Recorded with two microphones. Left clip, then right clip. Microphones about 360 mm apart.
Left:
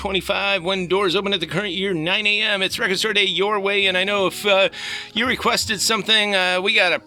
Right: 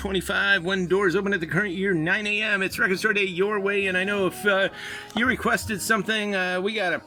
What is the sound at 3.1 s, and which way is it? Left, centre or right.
Speech, left.